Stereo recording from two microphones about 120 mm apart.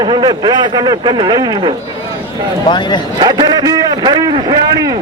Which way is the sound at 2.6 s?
40° left (ahead or behind).